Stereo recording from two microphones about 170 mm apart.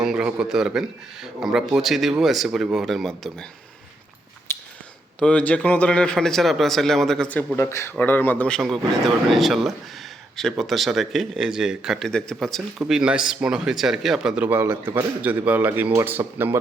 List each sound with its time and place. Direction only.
0.0 s a man's voice: 5° right (ahead or behind)
4.5 s a sound: 15° left (ahead or behind)
5.2 s a man's voice: 10° left (ahead or behind); by 16.6 s 15° right (ahead or behind)